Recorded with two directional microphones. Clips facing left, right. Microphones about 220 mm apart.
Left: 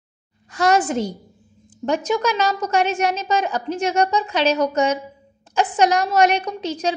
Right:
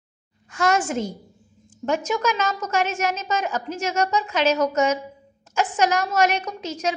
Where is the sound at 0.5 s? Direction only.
35° left (ahead or behind).